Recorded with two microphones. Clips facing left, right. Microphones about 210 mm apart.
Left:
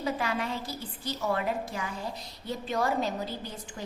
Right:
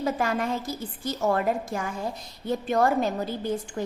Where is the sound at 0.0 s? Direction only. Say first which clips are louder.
Right 5 dB; 45° right (ahead or behind).